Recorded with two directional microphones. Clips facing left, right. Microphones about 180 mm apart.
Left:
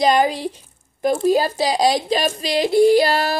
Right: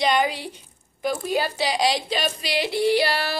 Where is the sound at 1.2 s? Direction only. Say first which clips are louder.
Left 8 dB; 40° left (ahead or behind).